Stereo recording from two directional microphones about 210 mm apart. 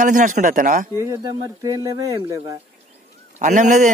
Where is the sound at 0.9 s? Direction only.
15° right (ahead or behind).